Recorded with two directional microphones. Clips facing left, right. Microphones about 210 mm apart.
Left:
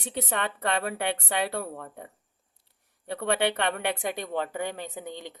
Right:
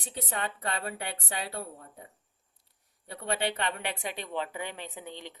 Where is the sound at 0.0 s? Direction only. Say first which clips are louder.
Left 5 dB; 70° left (ahead or behind).